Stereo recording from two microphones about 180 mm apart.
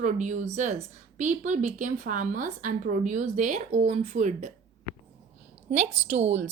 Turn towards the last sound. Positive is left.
turn(degrees=-40)  # may be behind; listen again after turning